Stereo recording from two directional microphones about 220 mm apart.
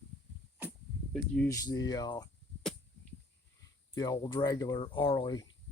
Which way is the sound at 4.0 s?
20° left (ahead or behind).